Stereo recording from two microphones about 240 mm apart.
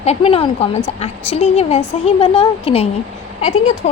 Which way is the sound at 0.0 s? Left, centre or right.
Left.